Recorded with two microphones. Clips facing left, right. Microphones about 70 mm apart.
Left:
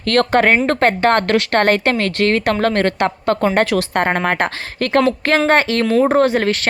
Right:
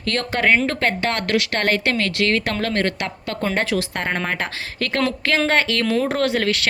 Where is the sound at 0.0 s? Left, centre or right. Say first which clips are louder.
Left 7 dB; left.